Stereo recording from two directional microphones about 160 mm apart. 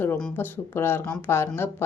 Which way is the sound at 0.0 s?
10° left (ahead or behind).